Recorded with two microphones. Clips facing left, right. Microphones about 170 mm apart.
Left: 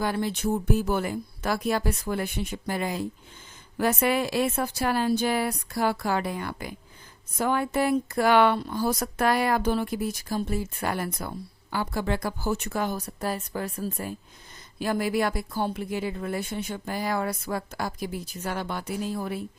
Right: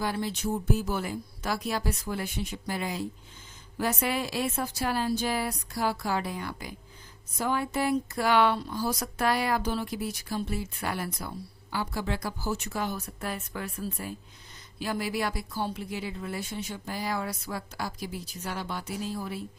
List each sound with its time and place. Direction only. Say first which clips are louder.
0.0 s a woman's voice: left 4 dB; 55° left (ahead or behind)